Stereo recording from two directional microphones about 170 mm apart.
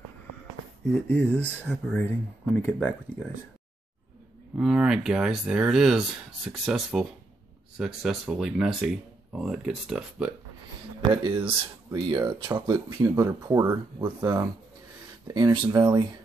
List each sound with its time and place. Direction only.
1.0 s speech: 10° left (ahead or behind)
4.6 s speech: 5° right (ahead or behind)
11.2 s speech: 30° right (ahead or behind)